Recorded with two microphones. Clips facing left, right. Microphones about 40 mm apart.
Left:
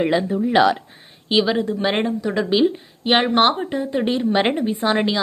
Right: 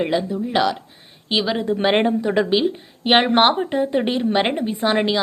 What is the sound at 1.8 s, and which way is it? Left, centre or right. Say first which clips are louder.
Speech: right 3 dB; centre.